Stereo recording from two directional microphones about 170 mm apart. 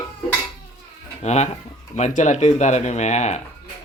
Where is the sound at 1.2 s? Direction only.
40° left (ahead or behind).